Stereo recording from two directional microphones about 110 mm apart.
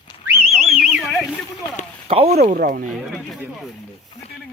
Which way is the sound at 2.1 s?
70° right (ahead or behind).